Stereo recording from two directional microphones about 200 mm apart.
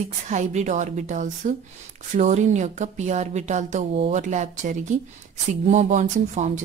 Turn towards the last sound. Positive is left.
turn(degrees=-35)  # may be behind; listen again after turning